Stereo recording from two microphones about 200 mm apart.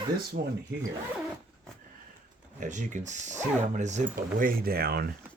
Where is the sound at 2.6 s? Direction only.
40° right (ahead or behind).